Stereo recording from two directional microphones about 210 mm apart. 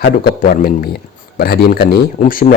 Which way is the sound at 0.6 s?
45° left (ahead or behind).